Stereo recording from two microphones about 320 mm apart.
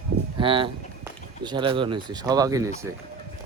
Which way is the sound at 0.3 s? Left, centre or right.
Centre.